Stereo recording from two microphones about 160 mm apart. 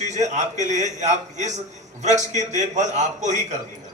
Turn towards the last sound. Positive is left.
turn(degrees=-50)  # may be behind; listen again after turning